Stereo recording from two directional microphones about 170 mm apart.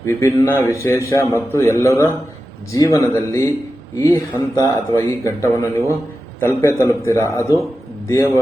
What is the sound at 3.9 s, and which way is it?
Speech, 20° left (ahead or behind).